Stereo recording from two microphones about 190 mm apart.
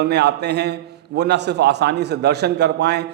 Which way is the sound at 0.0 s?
60° right (ahead or behind).